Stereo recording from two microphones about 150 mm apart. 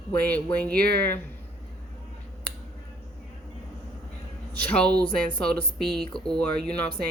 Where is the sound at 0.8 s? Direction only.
90° right.